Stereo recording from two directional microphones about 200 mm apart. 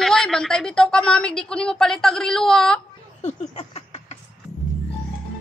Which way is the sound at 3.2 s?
30° left (ahead or behind).